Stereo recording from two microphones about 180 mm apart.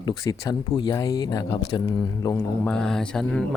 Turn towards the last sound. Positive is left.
turn(degrees=5)  # may be behind; listen again after turning